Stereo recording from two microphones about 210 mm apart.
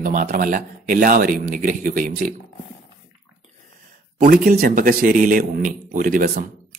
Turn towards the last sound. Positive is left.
turn(degrees=-40)  # may be behind; listen again after turning